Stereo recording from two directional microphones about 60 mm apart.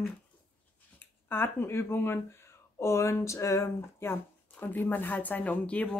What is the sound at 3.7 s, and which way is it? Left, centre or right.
Speech, left.